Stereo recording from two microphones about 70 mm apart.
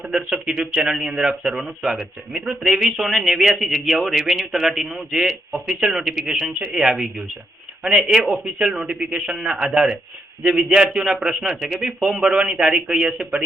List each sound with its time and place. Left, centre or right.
0.0 s a man's voice: centre